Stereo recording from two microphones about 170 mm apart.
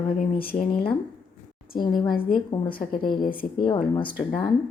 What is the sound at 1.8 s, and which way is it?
Speech, 25° left (ahead or behind).